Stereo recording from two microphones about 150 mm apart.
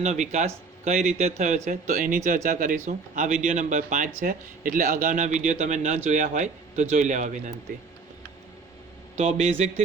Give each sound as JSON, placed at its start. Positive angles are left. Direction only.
{"t": 0.0, "sound": "speech", "side_deg": -50}
{"t": 9.1, "sound": "speech", "side_deg": -50}